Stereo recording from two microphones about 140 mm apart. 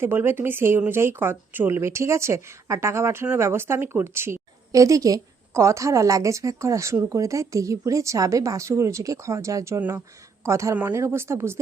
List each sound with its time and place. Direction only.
0.0 s speech: 15° right (ahead or behind)